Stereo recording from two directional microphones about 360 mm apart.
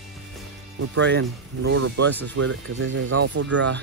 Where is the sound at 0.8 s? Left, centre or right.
Right.